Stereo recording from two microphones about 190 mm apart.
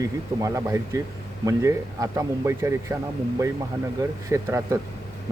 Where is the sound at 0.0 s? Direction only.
15° right (ahead or behind).